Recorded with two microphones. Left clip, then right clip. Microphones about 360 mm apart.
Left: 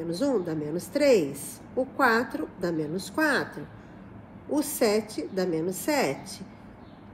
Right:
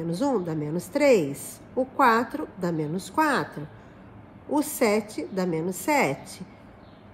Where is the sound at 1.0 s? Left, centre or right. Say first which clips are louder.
Right 2 dB; right.